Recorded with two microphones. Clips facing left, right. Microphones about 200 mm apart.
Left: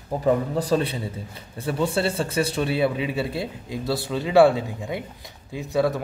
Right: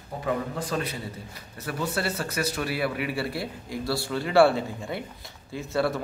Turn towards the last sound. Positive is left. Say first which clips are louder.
# left 4 dB
turn(degrees=15)  # may be behind; listen again after turning